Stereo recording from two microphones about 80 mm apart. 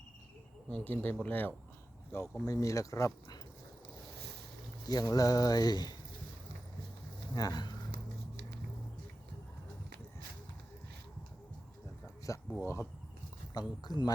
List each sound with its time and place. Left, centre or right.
0.7 s speech: left
2.1 s speech: left
4.9 s speech: left
7.3 s speech: left
12.5 s speech: left
13.5 s speech: left